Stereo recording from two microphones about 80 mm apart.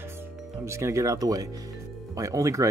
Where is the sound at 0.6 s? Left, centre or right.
Right.